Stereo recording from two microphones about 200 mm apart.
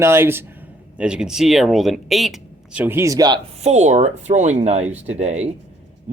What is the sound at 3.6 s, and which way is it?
Speech, 35° right (ahead or behind).